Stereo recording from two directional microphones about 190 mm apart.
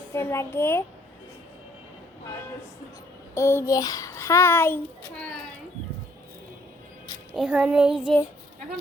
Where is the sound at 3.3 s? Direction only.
15° left (ahead or behind).